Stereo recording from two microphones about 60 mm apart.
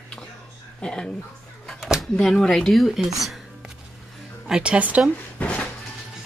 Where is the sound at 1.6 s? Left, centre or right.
Centre.